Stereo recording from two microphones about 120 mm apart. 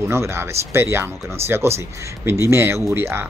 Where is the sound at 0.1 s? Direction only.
20° right (ahead or behind).